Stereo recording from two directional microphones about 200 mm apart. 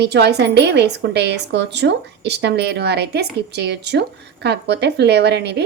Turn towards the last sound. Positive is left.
turn(degrees=-55)  # may be behind; listen again after turning